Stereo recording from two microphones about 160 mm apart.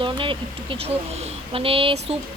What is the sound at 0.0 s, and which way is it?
Speech, 30° right (ahead or behind).